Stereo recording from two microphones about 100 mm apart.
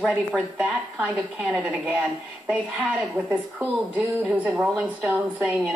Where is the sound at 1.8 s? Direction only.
15° right (ahead or behind).